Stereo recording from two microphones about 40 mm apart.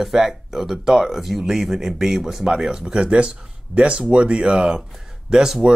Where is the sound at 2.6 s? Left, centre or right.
Centre.